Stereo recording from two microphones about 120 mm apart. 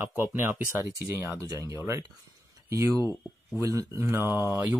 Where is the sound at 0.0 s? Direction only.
15° right (ahead or behind).